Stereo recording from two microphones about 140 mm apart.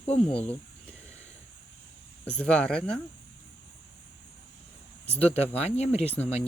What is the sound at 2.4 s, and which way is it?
Speech, 5° left (ahead or behind).